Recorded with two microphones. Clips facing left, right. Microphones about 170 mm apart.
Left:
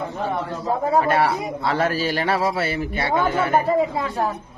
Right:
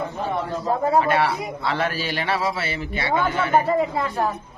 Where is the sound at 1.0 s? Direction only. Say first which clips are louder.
Left 1 dB; 45° left (ahead or behind).